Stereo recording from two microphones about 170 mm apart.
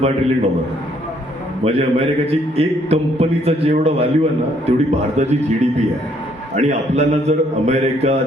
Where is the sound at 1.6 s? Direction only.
40° right (ahead or behind).